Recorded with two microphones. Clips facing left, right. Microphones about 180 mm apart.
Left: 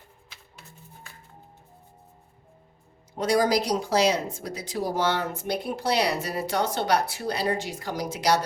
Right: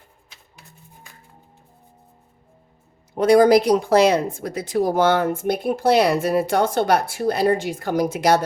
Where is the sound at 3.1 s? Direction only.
55° right (ahead or behind).